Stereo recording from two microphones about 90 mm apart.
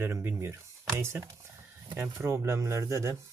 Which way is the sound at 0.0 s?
25° right (ahead or behind).